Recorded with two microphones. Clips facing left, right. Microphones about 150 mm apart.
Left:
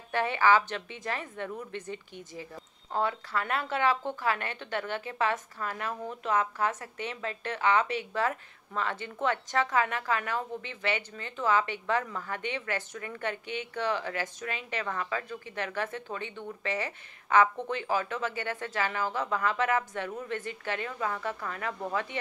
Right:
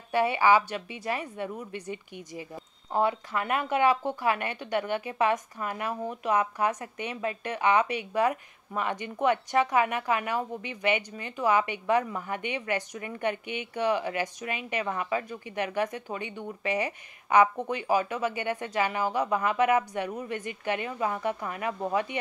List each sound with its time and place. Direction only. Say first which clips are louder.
0.1 s a woman's voice: right 2 dB; 10° right (ahead or behind)